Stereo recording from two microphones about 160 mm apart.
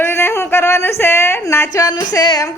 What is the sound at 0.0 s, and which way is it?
Speech, 15° left (ahead or behind).